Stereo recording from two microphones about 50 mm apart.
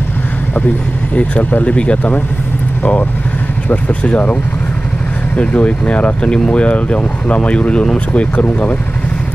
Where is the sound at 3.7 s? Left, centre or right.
Left.